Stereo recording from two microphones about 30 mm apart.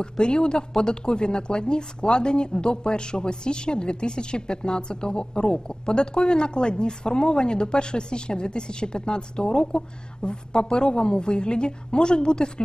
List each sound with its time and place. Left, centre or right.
0.0 s speech: left